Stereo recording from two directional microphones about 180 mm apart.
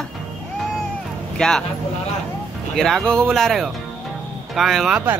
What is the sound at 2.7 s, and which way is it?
Speech, centre (ahead or behind).